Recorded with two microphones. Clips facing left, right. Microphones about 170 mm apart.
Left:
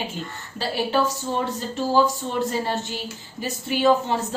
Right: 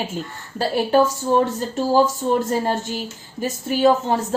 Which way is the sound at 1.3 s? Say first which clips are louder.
Right 10 dB; 45° right (ahead or behind).